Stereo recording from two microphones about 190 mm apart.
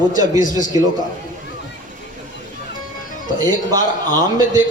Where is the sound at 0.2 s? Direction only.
20° right (ahead or behind).